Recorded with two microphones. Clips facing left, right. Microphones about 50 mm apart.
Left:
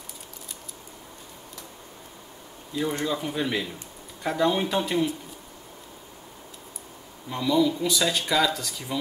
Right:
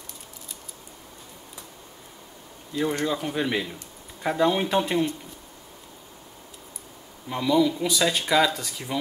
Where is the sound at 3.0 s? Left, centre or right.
Centre.